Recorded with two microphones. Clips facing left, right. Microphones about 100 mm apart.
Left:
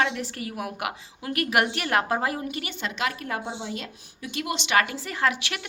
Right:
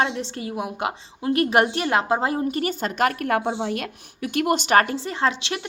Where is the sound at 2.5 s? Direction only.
40° right (ahead or behind).